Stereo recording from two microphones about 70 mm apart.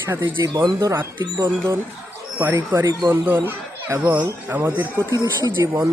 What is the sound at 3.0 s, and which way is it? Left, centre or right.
Speech, right.